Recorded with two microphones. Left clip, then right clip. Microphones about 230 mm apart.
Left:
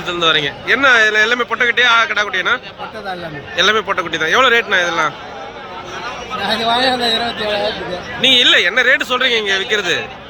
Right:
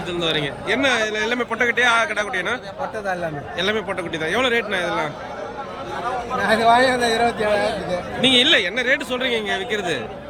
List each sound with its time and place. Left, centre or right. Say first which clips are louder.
0.1 s speech: left 8 dB; centre
3.6 s speech: left 9 dB; centre
6.6 s a man's voice: left 1 dB; right
8.2 s speech: left 5 dB; centre